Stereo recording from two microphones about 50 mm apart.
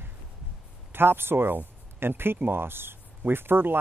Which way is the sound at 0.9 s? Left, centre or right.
Right.